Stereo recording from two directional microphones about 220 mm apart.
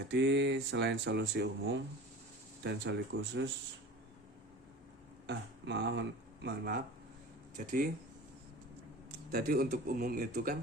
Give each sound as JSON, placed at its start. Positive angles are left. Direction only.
{"t": 0.0, "sound": "speech", "side_deg": -50}
{"t": 5.2, "sound": "speech", "side_deg": -50}
{"t": 7.6, "sound": "speech", "side_deg": -35}
{"t": 9.3, "sound": "speech", "side_deg": -45}